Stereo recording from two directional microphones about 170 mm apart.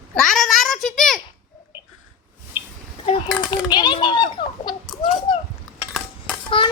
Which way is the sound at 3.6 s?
25° left (ahead or behind).